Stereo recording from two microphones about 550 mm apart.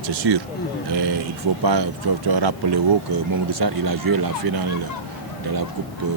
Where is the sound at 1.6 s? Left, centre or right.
Right.